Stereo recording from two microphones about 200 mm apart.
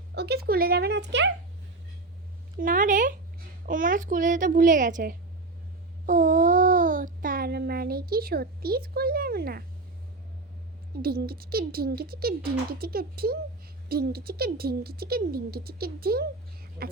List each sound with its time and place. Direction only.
0.1 s speech: 55° right (ahead or behind)
2.6 s a child's voice: 40° right (ahead or behind)
6.1 s a sound: 40° right (ahead or behind)
11.0 s speech: 50° right (ahead or behind)